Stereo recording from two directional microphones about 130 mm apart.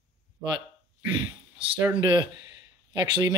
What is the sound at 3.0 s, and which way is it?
Speech, 35° right (ahead or behind).